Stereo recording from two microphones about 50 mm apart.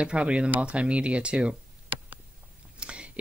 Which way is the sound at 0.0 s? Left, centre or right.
Right.